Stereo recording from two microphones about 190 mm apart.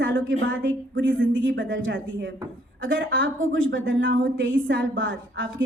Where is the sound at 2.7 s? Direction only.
85° right.